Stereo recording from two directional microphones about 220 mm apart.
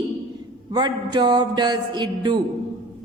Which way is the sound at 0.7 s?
20° right (ahead or behind).